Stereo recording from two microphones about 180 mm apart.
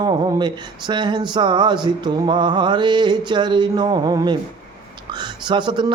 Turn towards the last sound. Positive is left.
turn(degrees=-25)  # may be behind; listen again after turning